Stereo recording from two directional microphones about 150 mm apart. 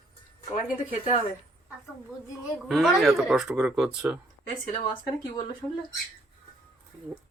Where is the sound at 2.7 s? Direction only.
Centre (ahead or behind).